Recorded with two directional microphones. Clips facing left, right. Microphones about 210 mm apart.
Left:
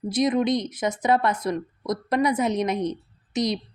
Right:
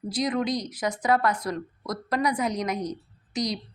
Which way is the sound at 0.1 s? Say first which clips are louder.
Left 5 dB; 20° left (ahead or behind).